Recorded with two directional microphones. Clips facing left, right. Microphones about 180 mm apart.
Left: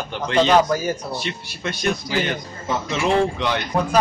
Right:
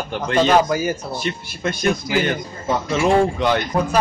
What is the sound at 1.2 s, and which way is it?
Speech, 50° right (ahead or behind).